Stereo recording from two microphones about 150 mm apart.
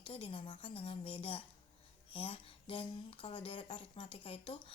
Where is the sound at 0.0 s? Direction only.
35° left (ahead or behind).